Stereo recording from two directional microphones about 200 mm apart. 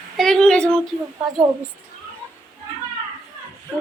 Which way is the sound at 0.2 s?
5° left (ahead or behind).